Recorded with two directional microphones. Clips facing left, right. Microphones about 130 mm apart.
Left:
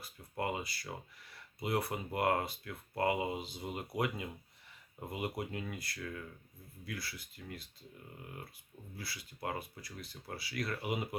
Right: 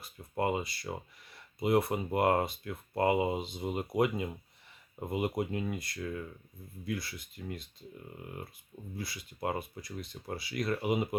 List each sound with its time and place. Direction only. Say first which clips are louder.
0.0 s speech: right 6 dB; 25° right (ahead or behind)
9.0 s speech: right 6 dB; 20° right (ahead or behind)